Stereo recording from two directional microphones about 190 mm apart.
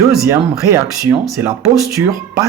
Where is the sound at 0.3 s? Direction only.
15° right (ahead or behind).